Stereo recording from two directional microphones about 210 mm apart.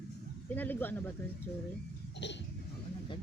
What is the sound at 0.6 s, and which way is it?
Speech, 10° left (ahead or behind).